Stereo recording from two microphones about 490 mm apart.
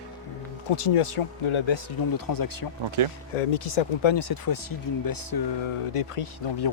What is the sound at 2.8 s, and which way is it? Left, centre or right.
Speech, right.